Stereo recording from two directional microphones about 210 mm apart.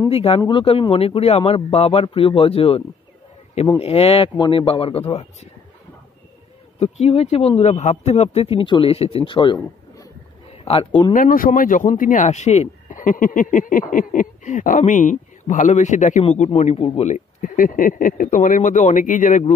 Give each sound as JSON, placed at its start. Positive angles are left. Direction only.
{"t": 0.1, "sound": "speech", "side_deg": 30}
{"t": 3.8, "sound": "speech", "side_deg": 30}
{"t": 6.8, "sound": "speech", "side_deg": 30}
{"t": 11.1, "sound": "speech", "side_deg": 40}